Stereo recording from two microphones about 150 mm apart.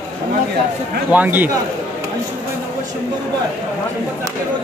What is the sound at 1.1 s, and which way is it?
Speech, 10° right (ahead or behind).